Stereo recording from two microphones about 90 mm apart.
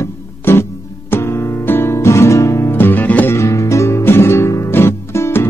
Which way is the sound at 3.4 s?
35° left (ahead or behind).